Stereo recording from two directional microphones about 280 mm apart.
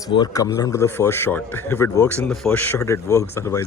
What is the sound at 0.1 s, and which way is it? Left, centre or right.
A man's voice, centre.